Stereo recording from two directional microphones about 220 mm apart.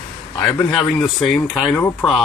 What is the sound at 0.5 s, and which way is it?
Speech, 5° left (ahead or behind).